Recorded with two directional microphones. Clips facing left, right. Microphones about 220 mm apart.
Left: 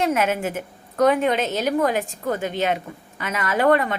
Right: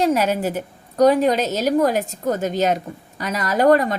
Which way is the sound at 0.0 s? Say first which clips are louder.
Right 3 dB; 35° right (ahead or behind).